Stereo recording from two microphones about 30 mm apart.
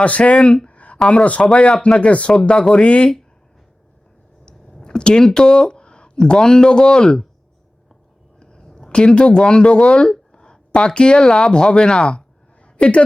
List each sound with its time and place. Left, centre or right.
0.0 s speech: left
0.7 s a sound: left
1.1 s speech: left
2.3 s speech: left
4.4 s a sound: left
5.2 s speech: left
8.9 s speech: left
11.9 s speech: centre
12.6 s a sound: left